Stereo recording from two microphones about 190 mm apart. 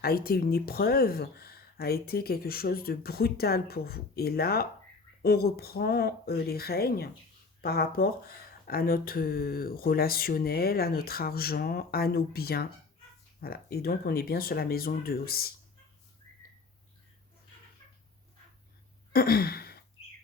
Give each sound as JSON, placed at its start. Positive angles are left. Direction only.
{"t": 0.0, "sound": "speech", "side_deg": 55}
{"t": 19.1, "sound": "sigh", "side_deg": 50}